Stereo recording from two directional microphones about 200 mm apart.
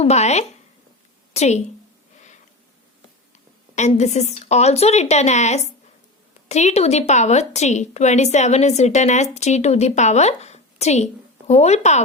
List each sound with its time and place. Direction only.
0.0 s a woman's voice: 35° left (ahead or behind)
3.8 s a woman's voice: 35° left (ahead or behind)